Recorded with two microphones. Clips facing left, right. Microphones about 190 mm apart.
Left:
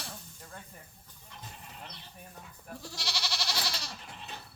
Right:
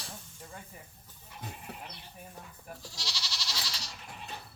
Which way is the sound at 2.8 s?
60° left (ahead or behind).